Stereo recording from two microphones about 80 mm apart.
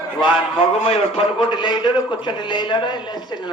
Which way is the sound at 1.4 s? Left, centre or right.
Left.